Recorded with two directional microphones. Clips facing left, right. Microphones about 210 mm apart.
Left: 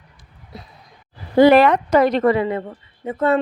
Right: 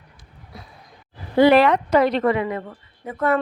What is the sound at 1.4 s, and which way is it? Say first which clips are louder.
Speech: left 3 dB; 45° left (ahead or behind).